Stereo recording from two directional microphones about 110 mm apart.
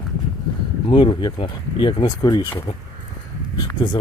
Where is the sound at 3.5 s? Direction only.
40° left (ahead or behind).